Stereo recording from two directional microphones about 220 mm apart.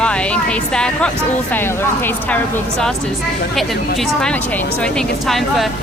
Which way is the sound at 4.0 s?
5° left (ahead or behind).